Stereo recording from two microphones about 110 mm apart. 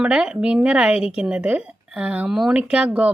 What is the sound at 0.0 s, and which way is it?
Speech, 10° right (ahead or behind).